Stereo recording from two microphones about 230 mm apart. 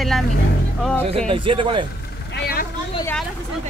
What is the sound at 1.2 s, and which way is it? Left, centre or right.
Speech, right.